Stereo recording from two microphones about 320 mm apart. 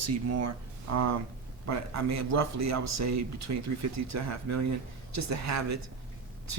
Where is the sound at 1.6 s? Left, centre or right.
Right.